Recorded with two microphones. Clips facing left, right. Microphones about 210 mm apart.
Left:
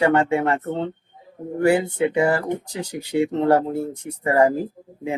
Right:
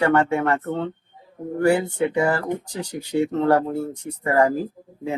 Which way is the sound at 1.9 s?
20° left (ahead or behind).